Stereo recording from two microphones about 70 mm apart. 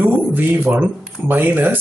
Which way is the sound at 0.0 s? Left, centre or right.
Right.